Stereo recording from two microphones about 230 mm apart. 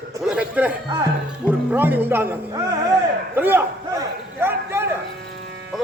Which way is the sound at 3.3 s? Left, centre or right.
Centre.